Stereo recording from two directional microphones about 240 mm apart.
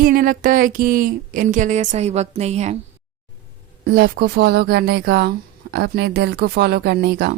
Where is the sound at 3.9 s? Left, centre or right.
Right.